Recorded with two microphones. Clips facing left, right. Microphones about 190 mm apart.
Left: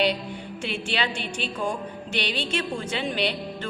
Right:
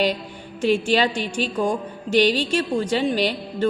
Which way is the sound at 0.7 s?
40° right (ahead or behind).